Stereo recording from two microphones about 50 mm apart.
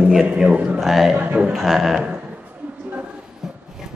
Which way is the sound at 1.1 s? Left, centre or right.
Right.